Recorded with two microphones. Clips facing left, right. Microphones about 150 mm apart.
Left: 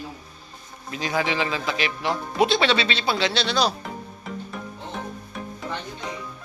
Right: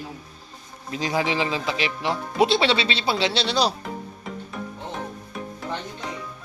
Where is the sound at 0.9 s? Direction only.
30° right (ahead or behind).